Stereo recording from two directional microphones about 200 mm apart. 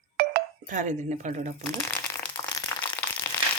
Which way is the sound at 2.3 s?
20° left (ahead or behind).